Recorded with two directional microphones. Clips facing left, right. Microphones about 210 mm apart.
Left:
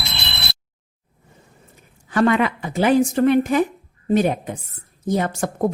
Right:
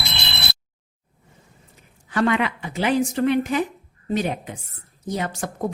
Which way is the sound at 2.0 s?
45° left (ahead or behind).